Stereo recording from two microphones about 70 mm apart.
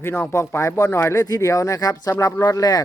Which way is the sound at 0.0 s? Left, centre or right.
Left.